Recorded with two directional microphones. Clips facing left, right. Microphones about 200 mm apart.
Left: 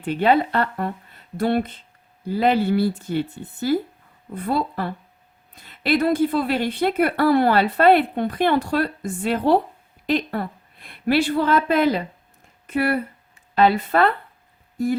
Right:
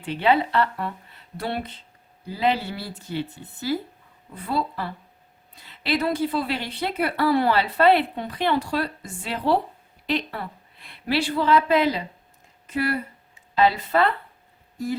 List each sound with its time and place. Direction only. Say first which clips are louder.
0.0 s a woman's voice: left 3 dB; 50° left (ahead or behind)